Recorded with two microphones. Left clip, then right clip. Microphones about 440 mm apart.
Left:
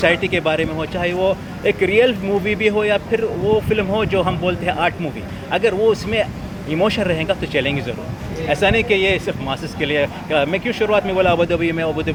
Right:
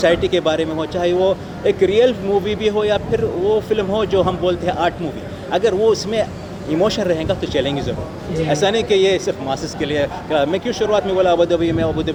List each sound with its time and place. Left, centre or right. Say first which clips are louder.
0.0 s speech: right 1 dB; left